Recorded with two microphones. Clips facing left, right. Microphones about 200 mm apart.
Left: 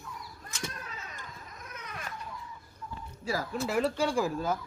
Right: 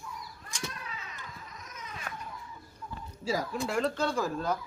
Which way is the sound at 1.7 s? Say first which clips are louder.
Left 1 dB; 65° left (ahead or behind).